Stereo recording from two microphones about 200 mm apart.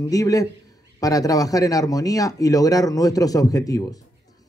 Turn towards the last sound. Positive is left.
turn(degrees=15)  # may be behind; listen again after turning